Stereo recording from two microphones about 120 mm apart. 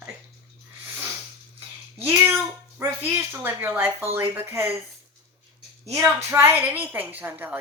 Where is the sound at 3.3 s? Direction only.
15° right (ahead or behind).